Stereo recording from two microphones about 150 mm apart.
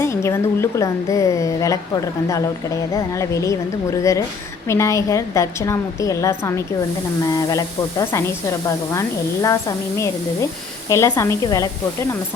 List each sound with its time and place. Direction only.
0.0 s a woman's voice: 20° left (ahead or behind)